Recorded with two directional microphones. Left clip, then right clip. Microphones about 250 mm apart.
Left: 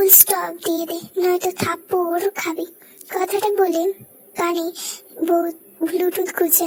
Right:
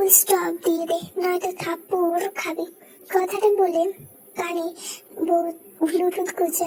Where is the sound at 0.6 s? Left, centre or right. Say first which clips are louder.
Right 1 dB; left.